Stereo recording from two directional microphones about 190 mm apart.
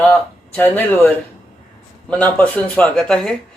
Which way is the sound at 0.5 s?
10° left (ahead or behind).